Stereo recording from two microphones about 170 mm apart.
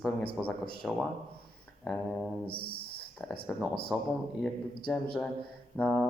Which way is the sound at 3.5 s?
Centre (ahead or behind).